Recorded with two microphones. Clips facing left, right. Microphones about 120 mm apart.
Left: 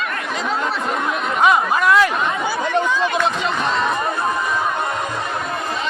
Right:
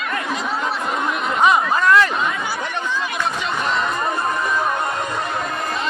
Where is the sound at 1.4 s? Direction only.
5° left (ahead or behind).